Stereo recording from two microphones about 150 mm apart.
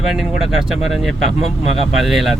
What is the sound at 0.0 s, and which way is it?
Speech, centre (ahead or behind).